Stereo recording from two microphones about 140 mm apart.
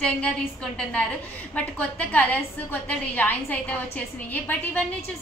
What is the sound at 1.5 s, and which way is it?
A woman's voice, 10° left (ahead or behind).